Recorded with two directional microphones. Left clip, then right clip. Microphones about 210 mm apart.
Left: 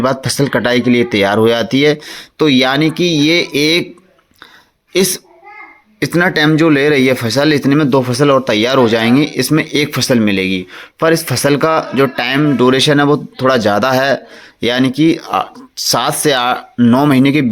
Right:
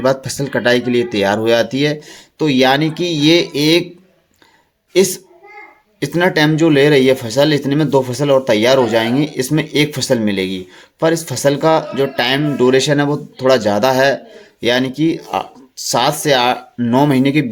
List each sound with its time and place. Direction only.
0.0 s speech: 20° left (ahead or behind)
4.9 s speech: 20° left (ahead or behind)